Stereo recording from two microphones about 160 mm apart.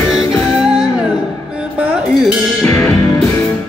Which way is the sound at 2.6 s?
20° left (ahead or behind).